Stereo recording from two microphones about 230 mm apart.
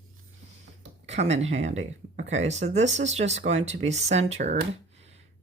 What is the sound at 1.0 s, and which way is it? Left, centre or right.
Speech, right.